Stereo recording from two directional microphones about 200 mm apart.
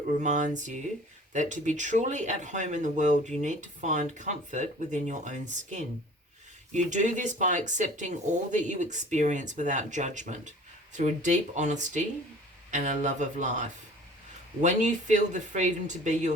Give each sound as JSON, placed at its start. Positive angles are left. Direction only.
{"t": 0.2, "sound": "speech", "side_deg": -40}